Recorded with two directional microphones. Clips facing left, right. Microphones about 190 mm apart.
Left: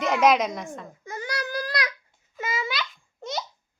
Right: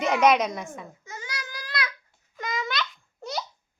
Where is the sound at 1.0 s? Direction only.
55° left (ahead or behind).